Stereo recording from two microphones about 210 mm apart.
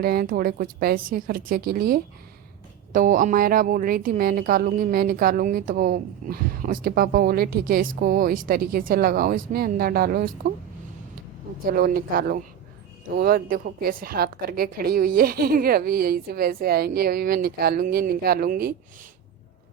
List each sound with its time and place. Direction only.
0.0 s a woman's voice: 45° right (ahead or behind)
11.7 s a woman's voice: 45° right (ahead or behind)